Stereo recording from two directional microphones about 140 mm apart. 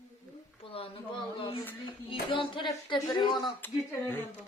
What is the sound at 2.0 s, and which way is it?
Speech, 35° left (ahead or behind).